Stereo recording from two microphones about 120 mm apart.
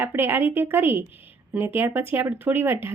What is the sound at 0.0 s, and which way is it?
Speech, 20° right (ahead or behind).